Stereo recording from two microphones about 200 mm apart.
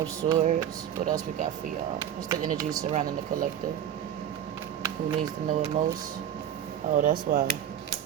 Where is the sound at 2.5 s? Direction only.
15° right (ahead or behind).